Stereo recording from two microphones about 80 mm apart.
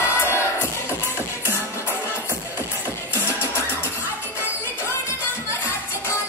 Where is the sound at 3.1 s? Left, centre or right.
Left.